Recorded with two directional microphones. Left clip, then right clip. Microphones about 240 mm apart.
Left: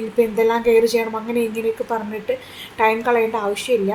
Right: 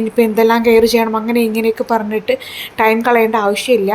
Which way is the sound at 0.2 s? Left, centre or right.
Right.